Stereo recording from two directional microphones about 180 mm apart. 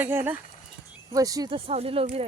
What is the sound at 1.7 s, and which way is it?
Speech, 35° right (ahead or behind).